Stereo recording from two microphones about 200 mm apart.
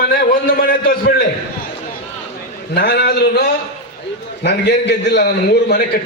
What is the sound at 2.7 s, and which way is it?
A man's voice, 55° left (ahead or behind).